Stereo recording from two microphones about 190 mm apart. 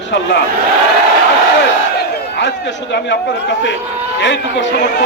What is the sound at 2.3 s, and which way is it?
A man's voice, 65° left (ahead or behind).